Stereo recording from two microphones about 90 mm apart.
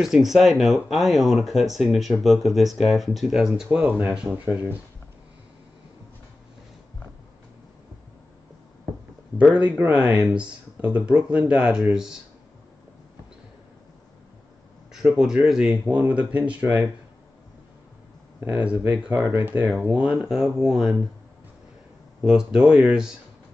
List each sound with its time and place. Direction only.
0.0 s speech: 5° right (ahead or behind)
3.7 s speech: 15° right (ahead or behind)
9.4 s speech: 15° right (ahead or behind)
14.9 s speech: 5° right (ahead or behind)
16.1 s speech: 15° right (ahead or behind)
18.4 s speech: 15° right (ahead or behind)
19.1 s speech: 30° right (ahead or behind)
19.8 s speech: 10° right (ahead or behind)
22.2 s speech: 10° right (ahead or behind)